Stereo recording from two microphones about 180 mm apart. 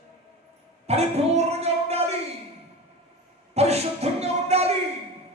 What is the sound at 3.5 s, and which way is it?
Speech, 35° right (ahead or behind).